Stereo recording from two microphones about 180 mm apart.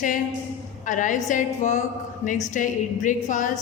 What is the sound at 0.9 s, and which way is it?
A woman's voice, 45° left (ahead or behind).